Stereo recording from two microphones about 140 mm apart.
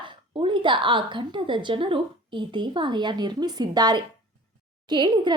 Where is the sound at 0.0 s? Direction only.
35° right (ahead or behind).